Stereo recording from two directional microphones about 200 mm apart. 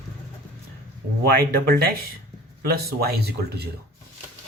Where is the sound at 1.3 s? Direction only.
50° right (ahead or behind).